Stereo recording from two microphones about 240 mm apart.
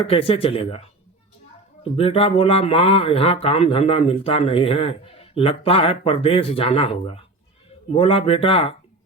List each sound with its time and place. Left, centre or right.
0.0 s speech: left